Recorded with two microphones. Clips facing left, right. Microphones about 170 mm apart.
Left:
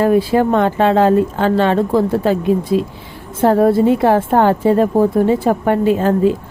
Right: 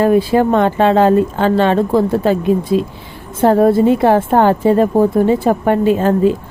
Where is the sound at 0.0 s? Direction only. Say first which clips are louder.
Right 1 dB; 25° right (ahead or behind).